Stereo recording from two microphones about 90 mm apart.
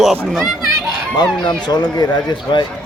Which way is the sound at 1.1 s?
60° left (ahead or behind).